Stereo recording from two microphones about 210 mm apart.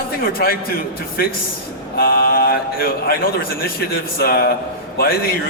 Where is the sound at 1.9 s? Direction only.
45° left (ahead or behind).